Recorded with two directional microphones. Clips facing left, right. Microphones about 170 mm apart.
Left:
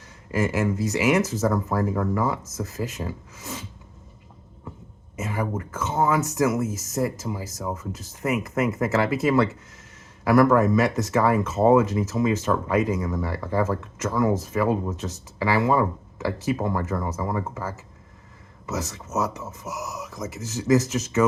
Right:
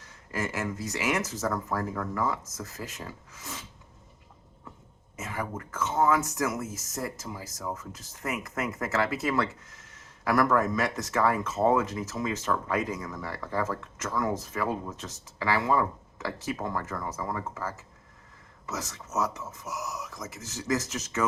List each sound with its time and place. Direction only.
0.3 s speech: 10° left (ahead or behind)
5.1 s speech: 10° left (ahead or behind)
10.5 s speech: 10° left (ahead or behind)
19.4 s speech: 25° left (ahead or behind)
19.6 s speech: 5° left (ahead or behind)